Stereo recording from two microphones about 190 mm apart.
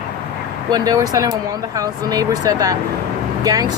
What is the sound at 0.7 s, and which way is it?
Speech, 20° right (ahead or behind).